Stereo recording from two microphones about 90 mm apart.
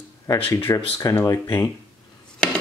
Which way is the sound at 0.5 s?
25° left (ahead or behind).